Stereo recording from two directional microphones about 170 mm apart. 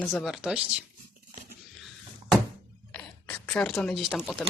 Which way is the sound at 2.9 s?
5° left (ahead or behind).